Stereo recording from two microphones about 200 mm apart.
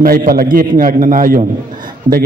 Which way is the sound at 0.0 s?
45° right (ahead or behind).